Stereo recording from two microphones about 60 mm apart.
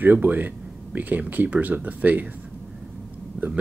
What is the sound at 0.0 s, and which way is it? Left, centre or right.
Speech, right.